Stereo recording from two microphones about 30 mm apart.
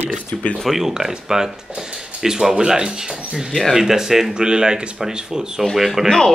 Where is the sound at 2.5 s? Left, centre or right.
Right.